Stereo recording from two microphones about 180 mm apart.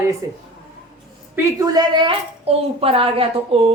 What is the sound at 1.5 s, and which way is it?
A woman's voice, 20° right (ahead or behind).